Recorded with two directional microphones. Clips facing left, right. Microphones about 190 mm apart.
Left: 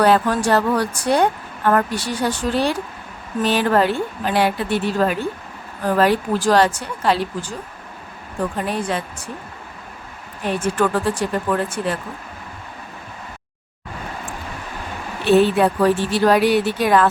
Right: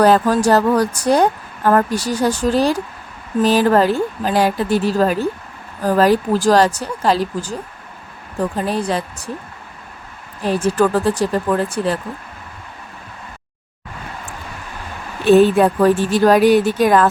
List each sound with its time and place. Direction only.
0.0 s speech: 40° right (ahead or behind)
8.5 s speech: 35° right (ahead or behind)
10.4 s speech: 35° right (ahead or behind)
15.2 s a woman's voice: 45° right (ahead or behind)